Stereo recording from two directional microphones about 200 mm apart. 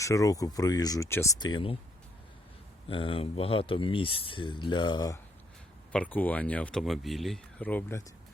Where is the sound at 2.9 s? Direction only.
25° left (ahead or behind).